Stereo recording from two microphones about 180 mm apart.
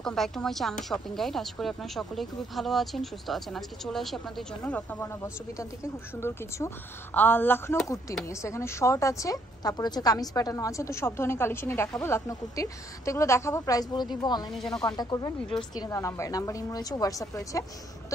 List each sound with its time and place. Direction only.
0.0 s a woman's voice: 5° left (ahead or behind); by 14.4 s 25° left (ahead or behind)
14.5 s speech: centre (ahead or behind)
14.9 s a woman's voice: 25° left (ahead or behind)